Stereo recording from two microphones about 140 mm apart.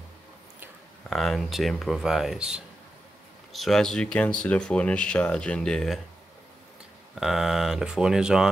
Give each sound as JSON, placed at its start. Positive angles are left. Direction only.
{"t": 1.1, "sound": "speech", "side_deg": 0}
{"t": 7.2, "sound": "speech", "side_deg": 0}